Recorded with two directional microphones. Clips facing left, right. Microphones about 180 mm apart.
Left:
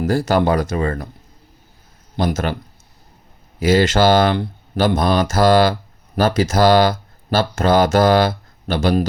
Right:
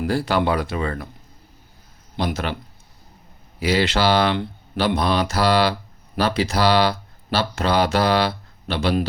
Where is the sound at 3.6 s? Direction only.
45° left (ahead or behind).